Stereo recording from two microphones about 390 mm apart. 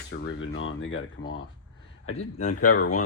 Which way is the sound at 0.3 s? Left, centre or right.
Left.